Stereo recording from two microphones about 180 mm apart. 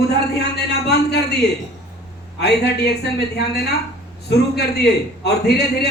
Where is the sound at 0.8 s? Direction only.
65° left (ahead or behind).